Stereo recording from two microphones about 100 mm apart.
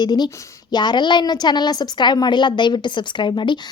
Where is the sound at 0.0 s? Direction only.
45° left (ahead or behind).